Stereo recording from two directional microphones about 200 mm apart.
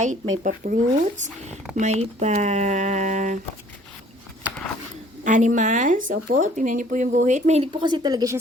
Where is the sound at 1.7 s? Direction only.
35° right (ahead or behind).